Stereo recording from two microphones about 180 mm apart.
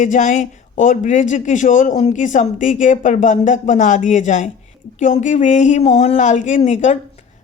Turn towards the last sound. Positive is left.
turn(degrees=40)  # may be behind; listen again after turning